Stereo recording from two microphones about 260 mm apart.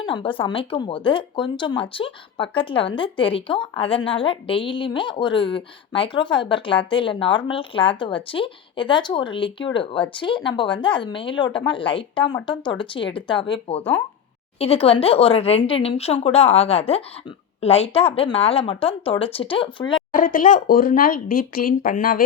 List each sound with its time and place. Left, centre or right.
0.0 s speech: centre
20.1 s speech: left